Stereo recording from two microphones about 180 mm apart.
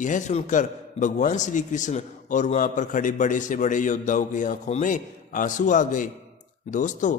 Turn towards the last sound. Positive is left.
turn(degrees=45)  # may be behind; listen again after turning